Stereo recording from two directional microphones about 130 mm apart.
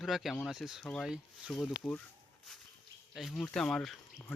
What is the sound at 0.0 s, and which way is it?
Speech, centre (ahead or behind).